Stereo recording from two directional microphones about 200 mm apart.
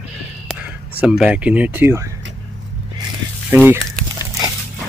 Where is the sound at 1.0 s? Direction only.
5° right (ahead or behind).